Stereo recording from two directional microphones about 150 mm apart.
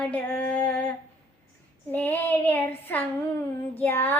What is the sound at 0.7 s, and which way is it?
Humming, 10° left (ahead or behind).